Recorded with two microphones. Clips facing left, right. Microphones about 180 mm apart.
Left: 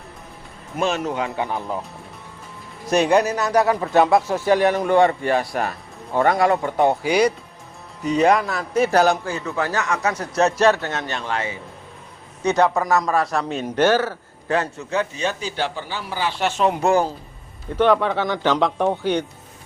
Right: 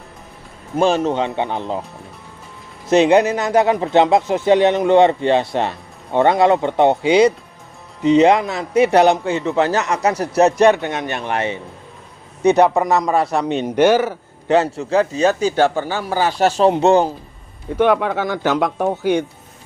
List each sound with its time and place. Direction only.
0.8 s speech: 30° right (ahead or behind)
2.8 s a man's voice: 25° right (ahead or behind)
17.7 s speech: 10° right (ahead or behind)